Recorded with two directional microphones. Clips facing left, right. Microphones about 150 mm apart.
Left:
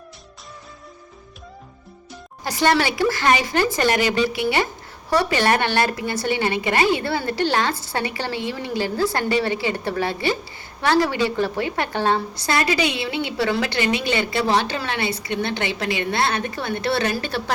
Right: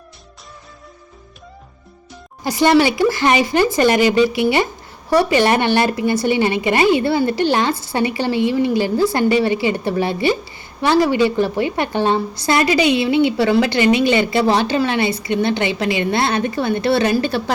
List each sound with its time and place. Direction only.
2.4 s a woman's voice: 15° right (ahead or behind)